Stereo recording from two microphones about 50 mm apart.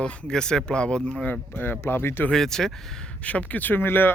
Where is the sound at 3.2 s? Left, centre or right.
Left.